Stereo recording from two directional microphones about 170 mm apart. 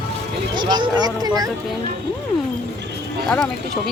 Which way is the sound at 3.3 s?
Centre (ahead or behind).